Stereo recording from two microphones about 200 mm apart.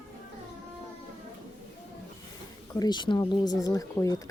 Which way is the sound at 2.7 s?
20° left (ahead or behind).